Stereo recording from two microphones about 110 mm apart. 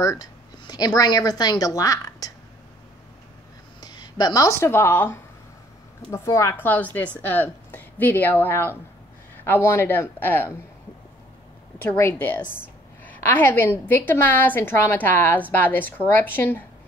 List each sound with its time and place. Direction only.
0.0 s speech: 35° left (ahead or behind)
3.8 s a woman's voice: 40° left (ahead or behind); by 10.6 s 20° left (ahead or behind)
11.8 s a woman's voice: 20° left (ahead or behind)